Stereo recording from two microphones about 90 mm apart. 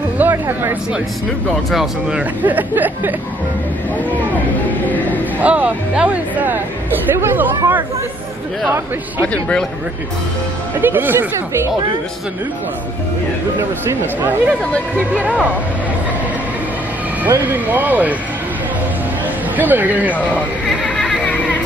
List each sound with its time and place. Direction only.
0.2 s a sound: 25° right (ahead or behind)
1.7 s speech: 5° right (ahead or behind)
2.4 s speech: 20° right (ahead or behind)
4.8 s speech: 20° left (ahead or behind)
5.4 s speech: 15° right (ahead or behind)
9.2 s a man's voice: 15° left (ahead or behind)
10.8 s speech: 20° right (ahead or behind)
15.1 s speech: 15° right (ahead or behind)
17.3 s speech: 20° right (ahead or behind)
19.5 s speech: 20° right (ahead or behind)
20.1 s a man's voice: 15° left (ahead or behind)
20.8 s a sound: 15° left (ahead or behind)